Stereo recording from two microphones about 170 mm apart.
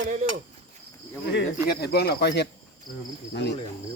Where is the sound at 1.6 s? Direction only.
70° left (ahead or behind).